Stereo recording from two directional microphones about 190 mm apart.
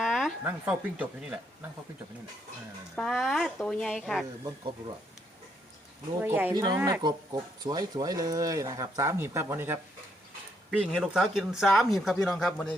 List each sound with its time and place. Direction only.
0.0 s a sound: centre (ahead or behind)
0.6 s speech: 10° right (ahead or behind)
2.9 s speech: centre (ahead or behind)
6.1 s speech: 10° right (ahead or behind)
10.7 s speech: centre (ahead or behind)